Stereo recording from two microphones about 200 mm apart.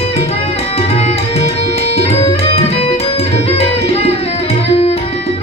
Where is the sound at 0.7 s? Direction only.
30° left (ahead or behind).